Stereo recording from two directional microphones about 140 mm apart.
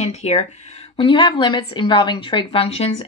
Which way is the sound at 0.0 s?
50° left (ahead or behind).